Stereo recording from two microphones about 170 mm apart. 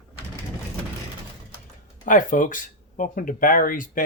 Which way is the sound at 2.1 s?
50° left (ahead or behind).